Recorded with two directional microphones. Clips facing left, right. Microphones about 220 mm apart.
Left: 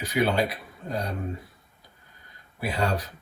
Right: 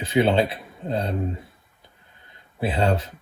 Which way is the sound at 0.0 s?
25° right (ahead or behind).